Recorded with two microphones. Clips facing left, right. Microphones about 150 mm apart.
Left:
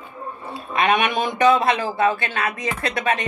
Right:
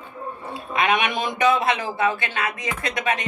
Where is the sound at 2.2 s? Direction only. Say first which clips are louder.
Left 2 dB; 15° right (ahead or behind).